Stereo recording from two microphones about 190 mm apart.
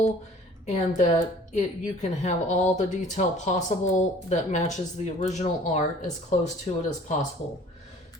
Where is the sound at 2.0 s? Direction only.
40° left (ahead or behind).